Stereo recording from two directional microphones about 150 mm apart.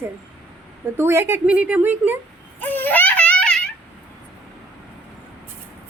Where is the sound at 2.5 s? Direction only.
10° left (ahead or behind).